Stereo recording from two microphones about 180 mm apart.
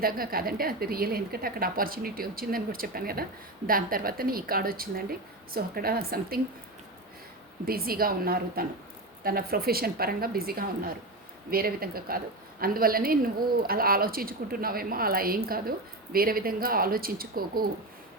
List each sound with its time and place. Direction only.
0.0 s a woman's voice: 55° right (ahead or behind)
7.6 s a woman's voice: 55° right (ahead or behind)